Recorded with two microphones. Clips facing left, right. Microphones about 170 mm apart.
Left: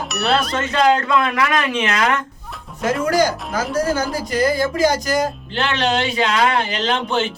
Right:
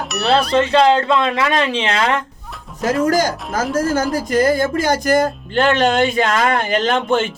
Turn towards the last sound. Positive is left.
turn(degrees=-50)  # may be behind; listen again after turning